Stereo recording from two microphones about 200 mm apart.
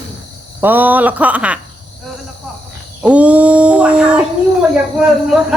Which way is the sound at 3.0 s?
5° right (ahead or behind).